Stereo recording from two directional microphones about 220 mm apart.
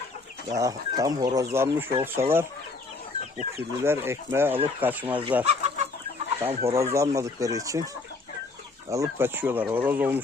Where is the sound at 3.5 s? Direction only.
10° right (ahead or behind).